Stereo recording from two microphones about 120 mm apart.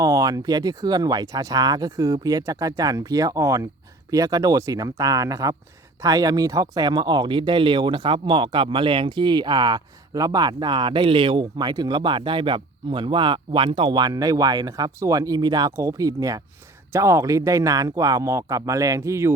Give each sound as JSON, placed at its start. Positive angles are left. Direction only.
{"t": 0.0, "sound": "speech", "side_deg": -30}